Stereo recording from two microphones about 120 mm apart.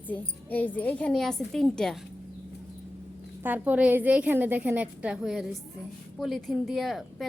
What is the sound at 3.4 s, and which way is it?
A woman's voice, 15° right (ahead or behind).